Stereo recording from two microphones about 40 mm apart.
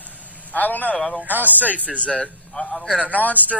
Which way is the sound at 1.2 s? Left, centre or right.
Right.